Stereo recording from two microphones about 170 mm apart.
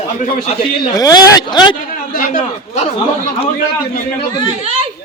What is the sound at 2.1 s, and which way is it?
Speech, 50° left (ahead or behind).